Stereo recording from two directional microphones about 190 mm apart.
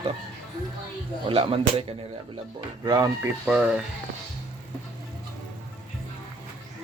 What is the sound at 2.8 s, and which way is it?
Speech, 20° right (ahead or behind).